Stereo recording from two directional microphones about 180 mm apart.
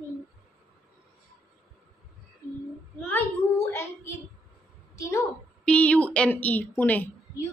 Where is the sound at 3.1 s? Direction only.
15° left (ahead or behind).